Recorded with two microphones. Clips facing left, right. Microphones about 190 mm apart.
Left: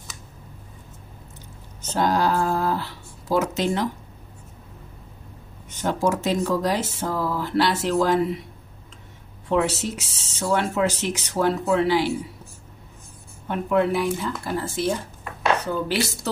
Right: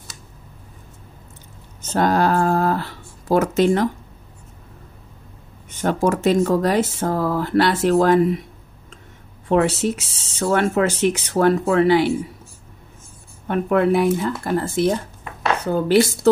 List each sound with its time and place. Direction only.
1.8 s speech: 55° right (ahead or behind)
5.7 s speech: 55° right (ahead or behind)
9.5 s speech: 55° right (ahead or behind)
13.5 s speech: 55° right (ahead or behind)